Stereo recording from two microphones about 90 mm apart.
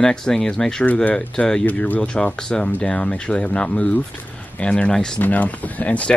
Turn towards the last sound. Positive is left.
turn(degrees=15)  # may be behind; listen again after turning